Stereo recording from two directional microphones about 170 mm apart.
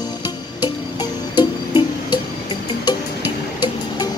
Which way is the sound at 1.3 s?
25° left (ahead or behind).